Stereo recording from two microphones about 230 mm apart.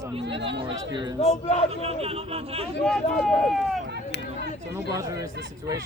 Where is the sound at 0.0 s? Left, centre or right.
Right.